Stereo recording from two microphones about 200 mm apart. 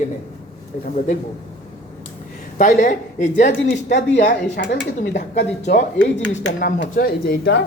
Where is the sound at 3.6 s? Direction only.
65° left (ahead or behind).